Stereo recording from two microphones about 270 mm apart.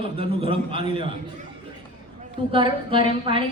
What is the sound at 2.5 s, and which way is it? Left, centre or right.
Speech, centre.